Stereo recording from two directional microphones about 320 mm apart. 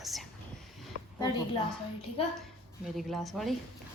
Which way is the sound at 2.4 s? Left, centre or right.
Centre.